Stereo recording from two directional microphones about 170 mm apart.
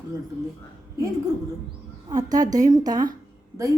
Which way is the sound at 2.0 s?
20° right (ahead or behind).